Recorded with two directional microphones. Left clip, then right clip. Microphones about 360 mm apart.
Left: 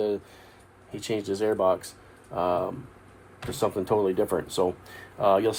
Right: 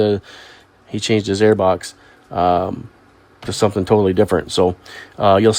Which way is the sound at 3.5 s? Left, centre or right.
Right.